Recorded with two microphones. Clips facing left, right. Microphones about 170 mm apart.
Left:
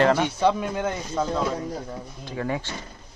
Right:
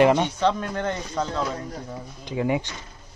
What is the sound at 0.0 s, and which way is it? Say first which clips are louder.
Speech: right 2 dB; 15° right (ahead or behind).